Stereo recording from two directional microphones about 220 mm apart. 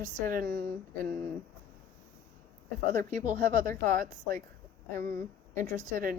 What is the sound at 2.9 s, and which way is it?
A woman's voice, 35° right (ahead or behind).